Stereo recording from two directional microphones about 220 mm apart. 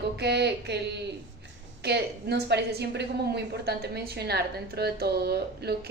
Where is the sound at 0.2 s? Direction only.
50° right (ahead or behind).